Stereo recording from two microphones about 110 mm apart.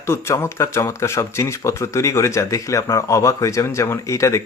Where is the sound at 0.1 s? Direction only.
25° left (ahead or behind).